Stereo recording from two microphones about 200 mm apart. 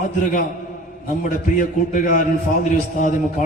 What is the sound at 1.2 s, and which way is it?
A man's voice, 40° left (ahead or behind).